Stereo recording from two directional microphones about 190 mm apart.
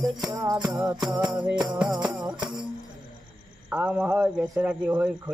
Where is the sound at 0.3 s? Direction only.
20° right (ahead or behind).